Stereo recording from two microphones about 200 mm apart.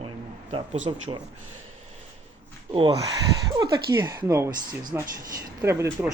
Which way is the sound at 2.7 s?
25° right (ahead or behind).